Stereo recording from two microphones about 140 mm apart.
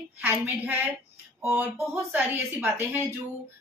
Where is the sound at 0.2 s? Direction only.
15° right (ahead or behind).